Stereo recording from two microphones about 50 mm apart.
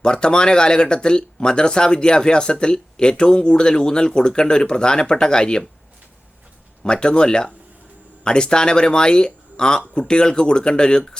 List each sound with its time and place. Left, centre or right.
0.0 s speech: centre
6.8 s speech: centre